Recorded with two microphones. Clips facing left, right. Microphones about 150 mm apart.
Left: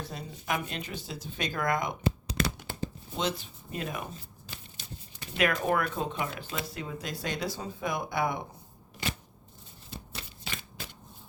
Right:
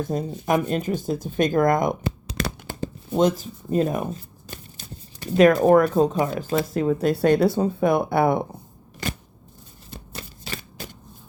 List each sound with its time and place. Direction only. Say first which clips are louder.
0.0 s speech: right 14 dB; 45° right (ahead or behind)
9.9 s shuffling cards: right 5 dB; 45° right (ahead or behind)